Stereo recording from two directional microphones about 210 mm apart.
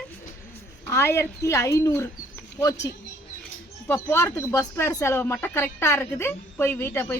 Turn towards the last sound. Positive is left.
turn(degrees=10)  # may be behind; listen again after turning